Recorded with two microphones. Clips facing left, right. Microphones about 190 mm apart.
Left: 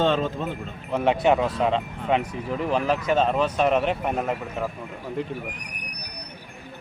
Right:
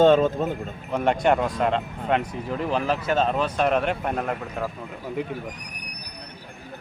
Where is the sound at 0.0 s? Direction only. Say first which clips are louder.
Right 6 dB; 45° right (ahead or behind).